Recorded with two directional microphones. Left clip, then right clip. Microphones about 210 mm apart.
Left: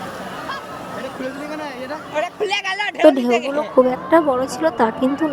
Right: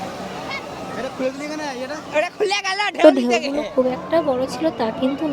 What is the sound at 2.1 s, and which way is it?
Speech, 40° right (ahead or behind).